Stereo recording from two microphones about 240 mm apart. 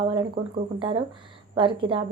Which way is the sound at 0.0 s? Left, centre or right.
Centre.